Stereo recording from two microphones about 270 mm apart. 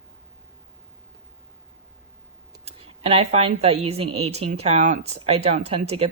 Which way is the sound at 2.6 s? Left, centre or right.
Right.